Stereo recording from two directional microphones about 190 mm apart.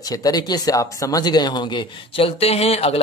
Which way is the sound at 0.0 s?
20° left (ahead or behind).